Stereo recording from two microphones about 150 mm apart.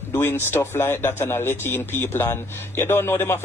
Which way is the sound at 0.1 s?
15° left (ahead or behind).